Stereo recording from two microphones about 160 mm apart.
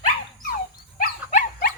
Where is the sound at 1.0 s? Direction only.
65° left (ahead or behind).